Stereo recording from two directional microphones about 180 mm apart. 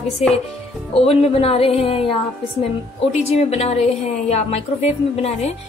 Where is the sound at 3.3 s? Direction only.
35° left (ahead or behind).